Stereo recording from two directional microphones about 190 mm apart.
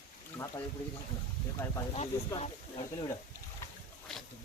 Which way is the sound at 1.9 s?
35° left (ahead or behind).